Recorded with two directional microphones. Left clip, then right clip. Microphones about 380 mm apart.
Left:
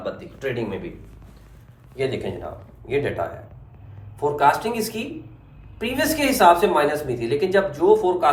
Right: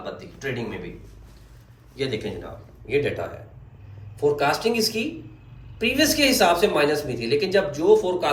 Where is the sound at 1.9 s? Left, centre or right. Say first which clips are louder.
Left 2 dB; centre.